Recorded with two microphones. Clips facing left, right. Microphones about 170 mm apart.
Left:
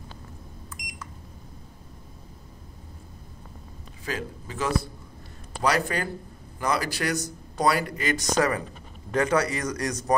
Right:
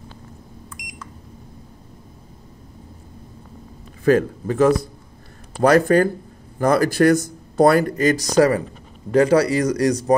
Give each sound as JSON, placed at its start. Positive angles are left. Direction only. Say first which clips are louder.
{"t": 4.0, "sound": "a man's voice", "louder": "right 17 dB", "side_deg": -55}